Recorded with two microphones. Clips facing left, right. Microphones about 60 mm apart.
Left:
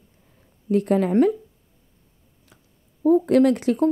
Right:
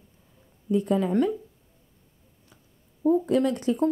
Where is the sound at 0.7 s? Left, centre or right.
Left.